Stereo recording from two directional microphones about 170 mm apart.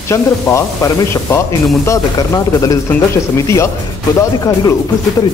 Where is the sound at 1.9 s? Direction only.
20° left (ahead or behind).